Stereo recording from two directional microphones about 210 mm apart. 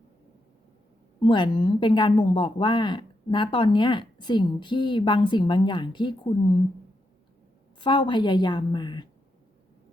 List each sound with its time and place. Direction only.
1.2 s a woman's voice: 20° left (ahead or behind)
7.8 s a woman's voice: 25° left (ahead or behind)